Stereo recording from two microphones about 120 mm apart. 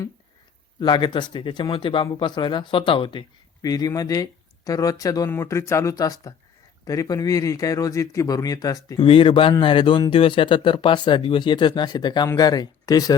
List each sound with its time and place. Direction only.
0.8 s speech: 40° left (ahead or behind)
3.6 s speech: 30° left (ahead or behind)
9.0 s speech: 45° left (ahead or behind); by 13.1 s 30° left (ahead or behind)